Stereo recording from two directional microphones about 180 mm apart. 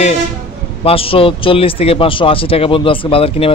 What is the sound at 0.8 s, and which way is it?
Speech, 30° left (ahead or behind).